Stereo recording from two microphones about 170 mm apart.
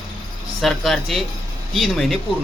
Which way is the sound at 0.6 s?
Centre (ahead or behind).